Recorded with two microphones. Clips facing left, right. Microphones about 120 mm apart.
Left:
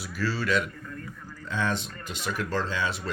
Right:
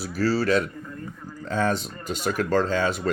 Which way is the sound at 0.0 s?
40° right (ahead or behind).